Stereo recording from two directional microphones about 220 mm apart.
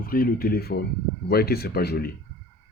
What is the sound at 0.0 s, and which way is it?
Speech, 40° left (ahead or behind).